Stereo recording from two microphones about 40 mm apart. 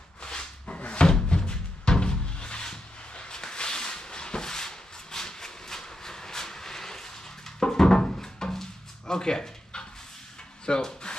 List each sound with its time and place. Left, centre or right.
0.2 s rub: centre
0.7 s slam: left
1.0 s music: centre
7.6 s a sound: centre